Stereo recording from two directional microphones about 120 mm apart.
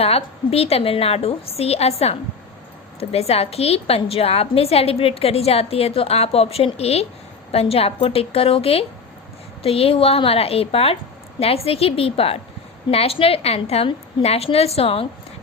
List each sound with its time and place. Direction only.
0.0 s a woman's voice: 55° left (ahead or behind)